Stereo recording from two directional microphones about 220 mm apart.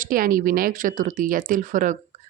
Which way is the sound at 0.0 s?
40° right (ahead or behind).